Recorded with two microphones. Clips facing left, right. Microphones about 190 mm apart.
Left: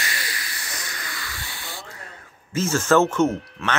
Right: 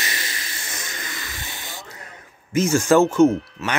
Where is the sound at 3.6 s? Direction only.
5° right (ahead or behind).